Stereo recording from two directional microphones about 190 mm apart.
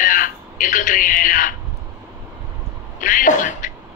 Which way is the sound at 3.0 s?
45° left (ahead or behind).